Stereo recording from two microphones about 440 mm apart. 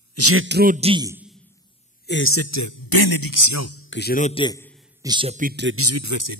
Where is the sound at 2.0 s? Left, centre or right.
Left; by 4.8 s centre.